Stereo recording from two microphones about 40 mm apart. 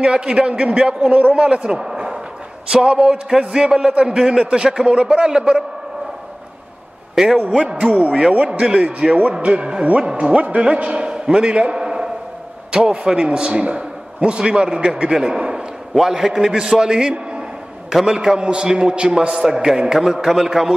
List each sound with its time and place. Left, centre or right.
0.0 s a man's voice: right
1.8 s a sound: centre
2.7 s a man's voice: right
7.2 s a man's voice: centre
7.8 s a man's voice: right
11.8 s a sound: centre
12.7 s a man's voice: right
19.3 s a man's voice: centre